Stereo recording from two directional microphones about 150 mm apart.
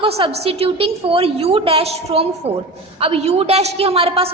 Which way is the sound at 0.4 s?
40° right (ahead or behind).